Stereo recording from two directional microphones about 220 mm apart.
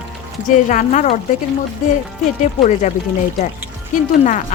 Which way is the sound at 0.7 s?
35° left (ahead or behind).